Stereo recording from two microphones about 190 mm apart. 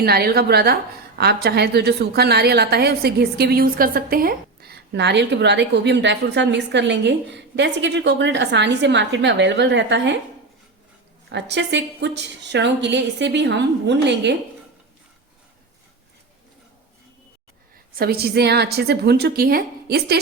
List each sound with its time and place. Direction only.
0.0 s a woman's voice: 55° right (ahead or behind)
11.3 s a woman's voice: 65° right (ahead or behind)
17.9 s a woman's voice: 55° right (ahead or behind)